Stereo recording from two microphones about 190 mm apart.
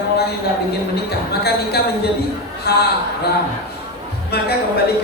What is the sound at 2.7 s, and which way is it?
Speech, 55° left (ahead or behind).